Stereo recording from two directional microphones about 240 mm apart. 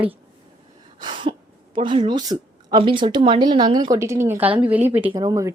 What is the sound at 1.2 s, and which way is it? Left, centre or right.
A woman's voice, centre.